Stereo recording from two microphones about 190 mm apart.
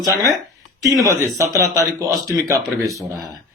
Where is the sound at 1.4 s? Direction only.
15° right (ahead or behind).